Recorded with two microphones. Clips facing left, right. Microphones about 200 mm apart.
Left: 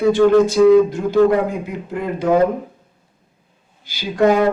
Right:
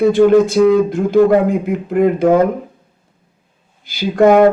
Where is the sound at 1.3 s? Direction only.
55° right (ahead or behind).